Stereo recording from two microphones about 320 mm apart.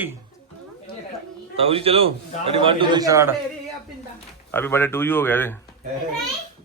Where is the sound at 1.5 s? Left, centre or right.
Centre.